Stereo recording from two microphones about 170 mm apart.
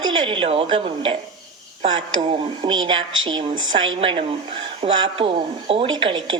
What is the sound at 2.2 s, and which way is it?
A woman's voice, 35° right (ahead or behind).